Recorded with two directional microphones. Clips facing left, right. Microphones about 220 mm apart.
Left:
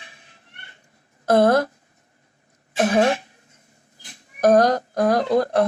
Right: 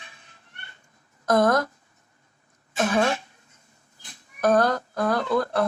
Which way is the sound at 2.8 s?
35° left (ahead or behind).